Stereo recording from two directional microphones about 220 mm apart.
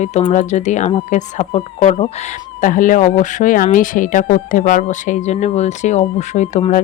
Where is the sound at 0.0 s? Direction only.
25° left (ahead or behind).